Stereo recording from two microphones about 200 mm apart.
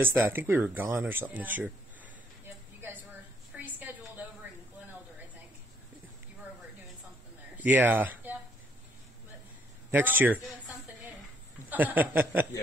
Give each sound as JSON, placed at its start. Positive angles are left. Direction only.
{"t": 0.0, "sound": "speech", "side_deg": -10}
{"t": 3.5, "sound": "a sound", "side_deg": -10}
{"t": 7.5, "sound": "speech", "side_deg": -10}
{"t": 9.8, "sound": "speech", "side_deg": -10}